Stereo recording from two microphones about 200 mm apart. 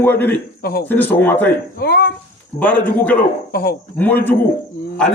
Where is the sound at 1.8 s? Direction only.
50° left (ahead or behind).